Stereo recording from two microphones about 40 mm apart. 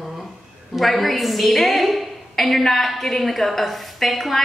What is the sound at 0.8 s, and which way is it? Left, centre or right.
A woman's voice, centre.